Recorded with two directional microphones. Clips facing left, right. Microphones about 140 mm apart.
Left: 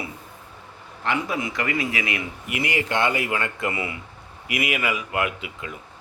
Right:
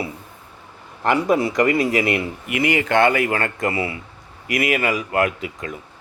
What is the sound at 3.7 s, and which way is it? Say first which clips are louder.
Speech: right 5 dB; 30° right (ahead or behind).